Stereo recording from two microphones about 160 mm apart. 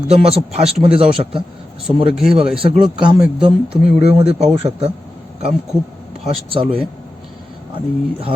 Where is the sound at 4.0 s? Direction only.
40° right (ahead or behind).